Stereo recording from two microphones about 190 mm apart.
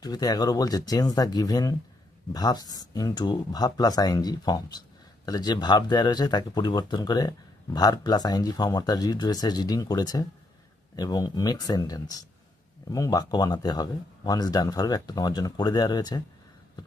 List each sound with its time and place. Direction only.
0.0 s speech: 20° left (ahead or behind)